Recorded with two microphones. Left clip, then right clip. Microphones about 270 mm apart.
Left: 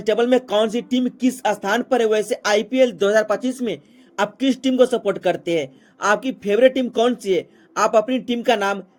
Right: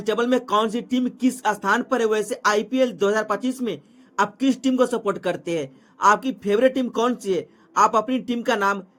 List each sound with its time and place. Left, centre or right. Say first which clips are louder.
0.0 s a man's voice: left 4 dB; centre